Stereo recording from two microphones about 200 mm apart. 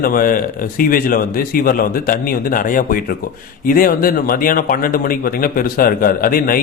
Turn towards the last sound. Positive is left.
turn(degrees=45)  # may be behind; listen again after turning